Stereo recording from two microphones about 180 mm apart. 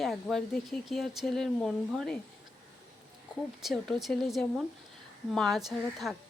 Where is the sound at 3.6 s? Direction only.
Centre (ahead or behind).